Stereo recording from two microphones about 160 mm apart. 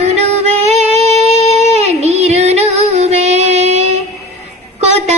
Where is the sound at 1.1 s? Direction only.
40° left (ahead or behind).